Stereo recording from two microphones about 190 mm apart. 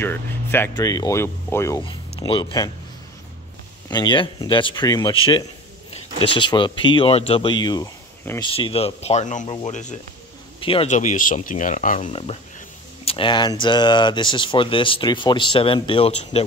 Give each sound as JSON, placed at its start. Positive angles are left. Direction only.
{"t": 0.0, "sound": "speech", "side_deg": 10}
{"t": 1.8, "sound": "speech", "side_deg": 25}
{"t": 3.9, "sound": "speech", "side_deg": 25}
{"t": 12.1, "sound": "speech", "side_deg": 30}